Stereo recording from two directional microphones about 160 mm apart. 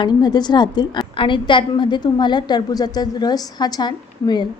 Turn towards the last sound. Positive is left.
turn(degrees=25)  # may be behind; listen again after turning